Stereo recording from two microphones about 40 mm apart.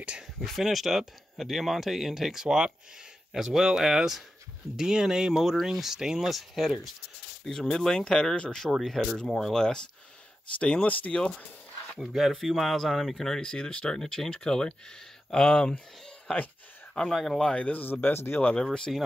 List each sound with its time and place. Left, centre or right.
0.4 s speech: centre
2.4 s speech: centre
6.3 s speech: centre
7.4 s speech: centre
8.7 s speech: centre
9.6 s speech: centre
12.0 s speech: centre; by 16.4 s left
17.1 s speech: centre
17.6 s speech: left
18.1 s speech: left
18.6 s speech: left